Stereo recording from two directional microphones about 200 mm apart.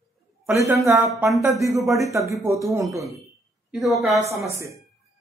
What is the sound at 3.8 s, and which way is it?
Speech, centre (ahead or behind).